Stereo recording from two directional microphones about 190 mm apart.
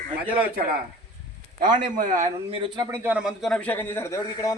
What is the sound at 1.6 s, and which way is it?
A man's voice, 45° right (ahead or behind).